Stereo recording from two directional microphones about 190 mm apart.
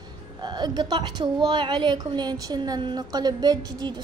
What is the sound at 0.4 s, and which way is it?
Speech, 20° right (ahead or behind).